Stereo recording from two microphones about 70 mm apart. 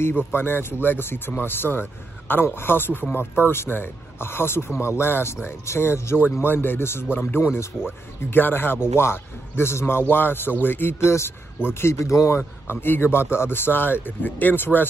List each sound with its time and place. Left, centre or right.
0.3 s speech: left
12.4 s speech: left